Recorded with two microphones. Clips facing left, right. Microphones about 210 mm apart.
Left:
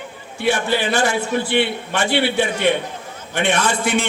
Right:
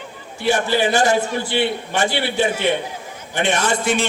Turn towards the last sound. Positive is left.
turn(degrees=60)  # may be behind; listen again after turning